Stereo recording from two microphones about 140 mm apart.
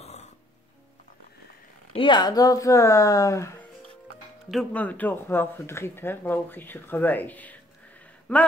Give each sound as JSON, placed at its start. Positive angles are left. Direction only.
{"t": 0.0, "sound": "music", "side_deg": 50}
{"t": 2.0, "sound": "speech", "side_deg": 35}
{"t": 4.5, "sound": "speech", "side_deg": 5}